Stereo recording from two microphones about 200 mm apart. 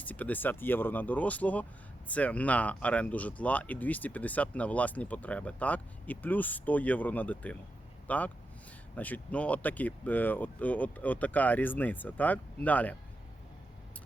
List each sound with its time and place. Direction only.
0.0 s speech: 10° left (ahead or behind)